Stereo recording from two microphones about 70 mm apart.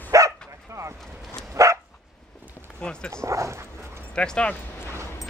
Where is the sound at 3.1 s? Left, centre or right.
Right.